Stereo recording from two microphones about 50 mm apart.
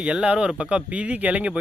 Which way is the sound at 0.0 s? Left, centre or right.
Centre.